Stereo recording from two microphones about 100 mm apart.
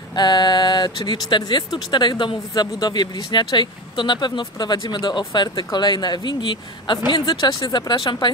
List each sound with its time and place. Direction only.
0.1 s speech: 45° left (ahead or behind)